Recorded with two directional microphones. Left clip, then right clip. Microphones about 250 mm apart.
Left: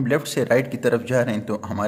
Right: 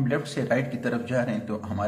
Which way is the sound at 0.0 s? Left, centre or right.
Left.